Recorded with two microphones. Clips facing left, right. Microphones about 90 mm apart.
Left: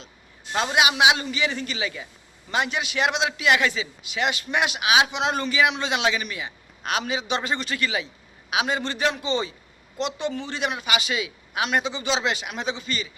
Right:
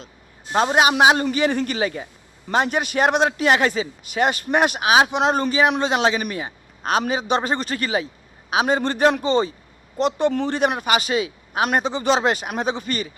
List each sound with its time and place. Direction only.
0.5 s a man's voice: 40° right (ahead or behind)